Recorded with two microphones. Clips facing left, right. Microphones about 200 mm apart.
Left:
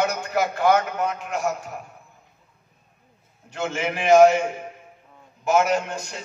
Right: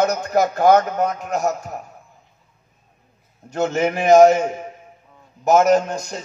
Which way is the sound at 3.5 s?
40° right (ahead or behind).